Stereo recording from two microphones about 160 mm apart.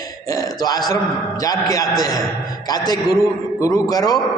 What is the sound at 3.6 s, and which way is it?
Speech, 25° left (ahead or behind).